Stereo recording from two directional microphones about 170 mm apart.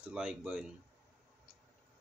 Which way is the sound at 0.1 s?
5° right (ahead or behind).